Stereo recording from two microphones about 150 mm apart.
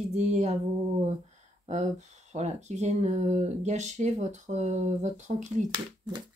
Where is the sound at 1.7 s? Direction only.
50° right (ahead or behind).